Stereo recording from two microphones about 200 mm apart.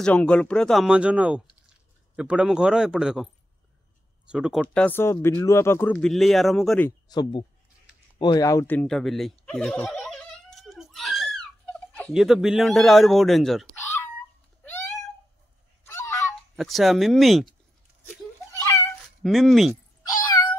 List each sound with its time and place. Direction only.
0.0 s speech: 5° left (ahead or behind)
4.3 s speech: 5° right (ahead or behind)
4.6 s speech: 5° left (ahead or behind)
7.1 s speech: 20° left (ahead or behind)
8.2 s turkey: 20° left (ahead or behind); by 11.4 s centre (ahead or behind)
11.9 s speech: centre (ahead or behind)
14.6 s cat: 10° left (ahead or behind)
15.8 s goose: 10° left (ahead or behind)
16.5 s speech: centre (ahead or behind)
19.2 s speech: centre (ahead or behind)